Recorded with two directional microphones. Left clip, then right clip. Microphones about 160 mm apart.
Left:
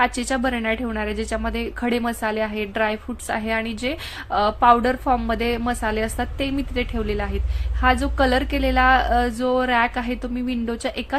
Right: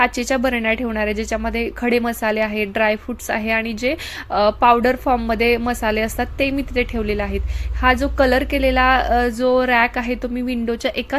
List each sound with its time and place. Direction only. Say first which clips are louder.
0.0 s a woman's voice: right 3 dB; 15° right (ahead or behind)